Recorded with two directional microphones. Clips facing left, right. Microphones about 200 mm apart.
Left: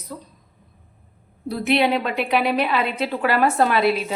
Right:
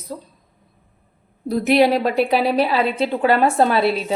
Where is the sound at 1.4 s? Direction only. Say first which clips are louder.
Right 4 dB; 45° right (ahead or behind).